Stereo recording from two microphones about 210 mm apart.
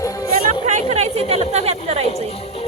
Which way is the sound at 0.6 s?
35° right (ahead or behind).